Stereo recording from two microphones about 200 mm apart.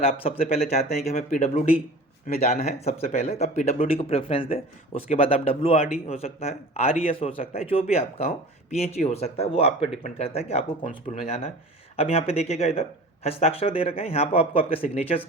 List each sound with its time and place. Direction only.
0.0 s a man's voice: 30° left (ahead or behind)